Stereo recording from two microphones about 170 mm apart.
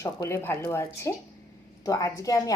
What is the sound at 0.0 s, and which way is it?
A woman's voice, 15° left (ahead or behind).